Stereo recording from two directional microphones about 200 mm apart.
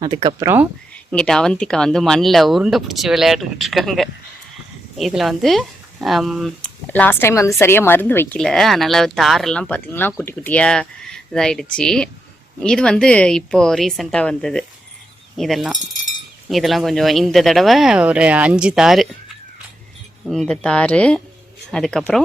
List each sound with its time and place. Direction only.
0.0 s speech: 20° right (ahead or behind)
1.1 s speech: 5° left (ahead or behind)
20.3 s speech: 5° left (ahead or behind)